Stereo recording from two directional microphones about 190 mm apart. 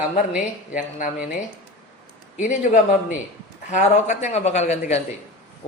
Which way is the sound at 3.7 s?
40° left (ahead or behind).